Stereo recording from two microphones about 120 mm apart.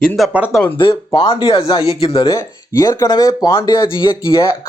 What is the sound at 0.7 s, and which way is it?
Speech, 45° left (ahead or behind).